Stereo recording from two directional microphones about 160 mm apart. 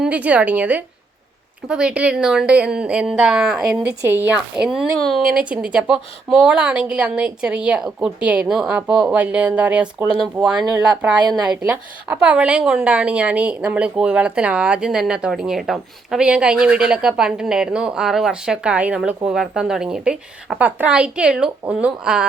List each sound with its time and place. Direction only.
0.0 s a woman's voice: 10° right (ahead or behind)
11.2 s a woman's voice: 25° right (ahead or behind)
11.4 s a woman's voice: 10° right (ahead or behind)